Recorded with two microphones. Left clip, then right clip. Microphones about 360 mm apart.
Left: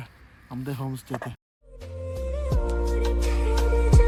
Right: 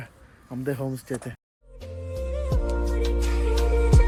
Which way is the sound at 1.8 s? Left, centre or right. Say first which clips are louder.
Even; centre.